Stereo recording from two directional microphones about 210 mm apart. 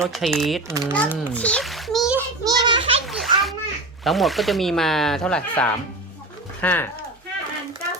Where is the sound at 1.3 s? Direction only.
5° left (ahead or behind).